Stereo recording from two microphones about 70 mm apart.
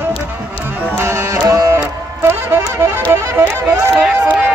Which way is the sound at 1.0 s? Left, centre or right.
Right.